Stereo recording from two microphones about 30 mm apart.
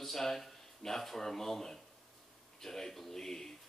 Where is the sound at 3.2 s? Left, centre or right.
Centre.